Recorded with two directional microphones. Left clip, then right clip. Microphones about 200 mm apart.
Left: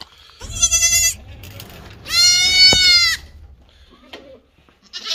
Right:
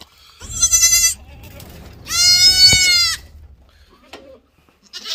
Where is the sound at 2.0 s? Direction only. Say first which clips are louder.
Right 1 dB; 15° right (ahead or behind).